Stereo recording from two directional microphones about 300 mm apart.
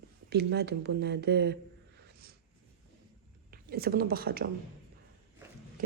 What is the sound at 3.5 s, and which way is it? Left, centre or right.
A woman's voice, right.